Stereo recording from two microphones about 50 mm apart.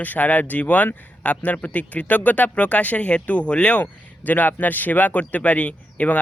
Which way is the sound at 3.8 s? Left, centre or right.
Left.